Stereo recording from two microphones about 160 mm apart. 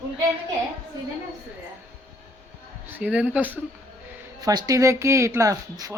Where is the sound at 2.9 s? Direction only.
10° right (ahead or behind).